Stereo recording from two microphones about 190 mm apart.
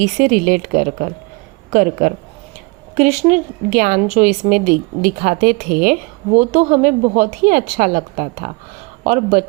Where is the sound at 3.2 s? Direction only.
45° right (ahead or behind).